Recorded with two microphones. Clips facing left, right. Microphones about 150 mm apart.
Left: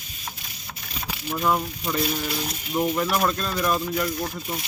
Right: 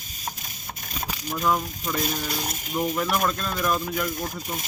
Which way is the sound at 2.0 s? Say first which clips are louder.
Left 2 dB; 45° right (ahead or behind).